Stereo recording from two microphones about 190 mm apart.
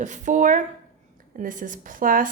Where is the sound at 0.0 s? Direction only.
40° right (ahead or behind).